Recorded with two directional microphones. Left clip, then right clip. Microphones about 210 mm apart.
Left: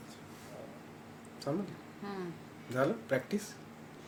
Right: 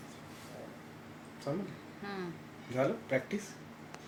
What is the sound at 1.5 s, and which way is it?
Speech, 15° left (ahead or behind).